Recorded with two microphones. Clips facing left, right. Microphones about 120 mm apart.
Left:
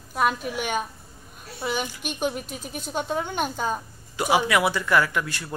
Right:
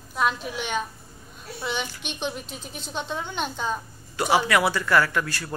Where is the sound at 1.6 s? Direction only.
5° left (ahead or behind).